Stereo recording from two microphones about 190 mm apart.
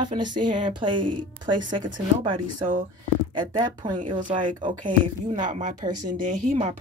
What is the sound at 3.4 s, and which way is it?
Speech, 25° right (ahead or behind).